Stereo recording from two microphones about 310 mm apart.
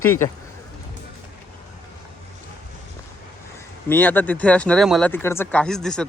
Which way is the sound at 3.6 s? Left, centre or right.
Centre.